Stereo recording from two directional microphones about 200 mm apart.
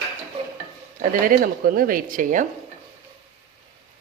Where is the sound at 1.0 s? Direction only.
45° right (ahead or behind).